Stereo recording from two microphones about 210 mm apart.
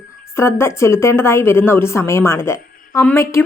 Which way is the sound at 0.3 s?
10° left (ahead or behind).